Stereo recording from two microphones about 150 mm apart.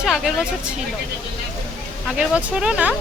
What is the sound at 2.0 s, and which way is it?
Speech, 5° right (ahead or behind).